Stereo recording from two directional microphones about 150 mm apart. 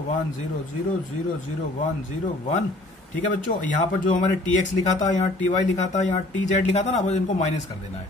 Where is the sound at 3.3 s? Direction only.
60° left (ahead or behind).